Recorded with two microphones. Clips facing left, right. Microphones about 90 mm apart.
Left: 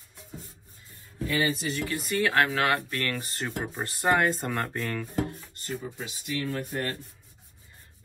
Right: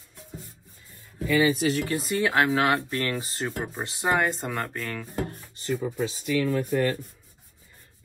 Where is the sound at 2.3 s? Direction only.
20° right (ahead or behind).